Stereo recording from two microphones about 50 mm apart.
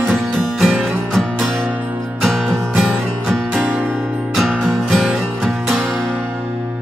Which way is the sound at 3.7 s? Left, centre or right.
Right.